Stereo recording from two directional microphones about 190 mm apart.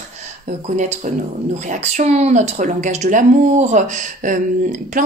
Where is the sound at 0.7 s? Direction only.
40° right (ahead or behind).